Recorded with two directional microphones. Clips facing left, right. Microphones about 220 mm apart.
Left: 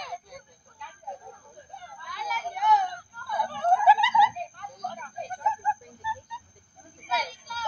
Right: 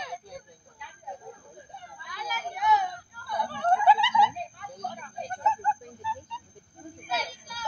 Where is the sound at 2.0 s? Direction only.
Centre (ahead or behind).